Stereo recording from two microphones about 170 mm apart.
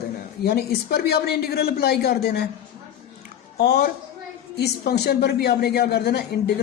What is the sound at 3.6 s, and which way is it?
A man's voice, 70° left (ahead or behind).